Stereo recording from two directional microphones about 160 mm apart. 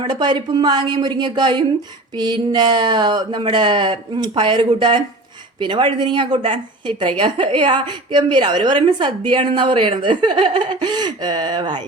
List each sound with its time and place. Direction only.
0.0 s a woman's voice: 30° right (ahead or behind)